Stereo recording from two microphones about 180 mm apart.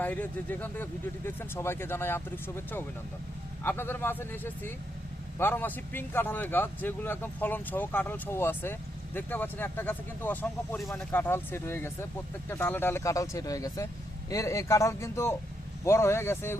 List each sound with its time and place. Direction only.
0.0 s speech: 10° left (ahead or behind)